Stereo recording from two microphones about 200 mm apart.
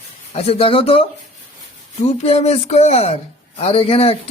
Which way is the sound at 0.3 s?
30° left (ahead or behind).